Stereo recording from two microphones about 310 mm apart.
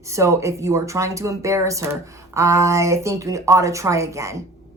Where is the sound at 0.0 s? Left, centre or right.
Centre.